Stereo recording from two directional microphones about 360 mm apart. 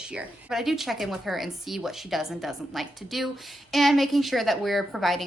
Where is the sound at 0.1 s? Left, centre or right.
Centre.